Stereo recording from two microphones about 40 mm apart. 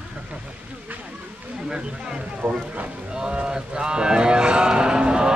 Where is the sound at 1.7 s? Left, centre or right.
Right.